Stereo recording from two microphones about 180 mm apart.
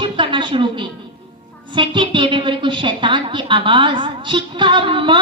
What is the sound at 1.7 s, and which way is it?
A woman's voice, 25° right (ahead or behind).